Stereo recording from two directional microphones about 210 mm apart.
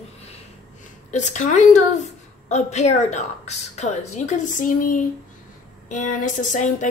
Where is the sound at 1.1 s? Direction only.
35° left (ahead or behind).